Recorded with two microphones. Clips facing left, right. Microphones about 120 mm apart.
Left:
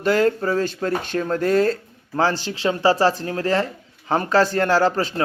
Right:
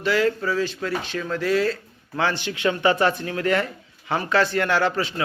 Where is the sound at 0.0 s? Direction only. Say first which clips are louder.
Left 3 dB; 45° left (ahead or behind).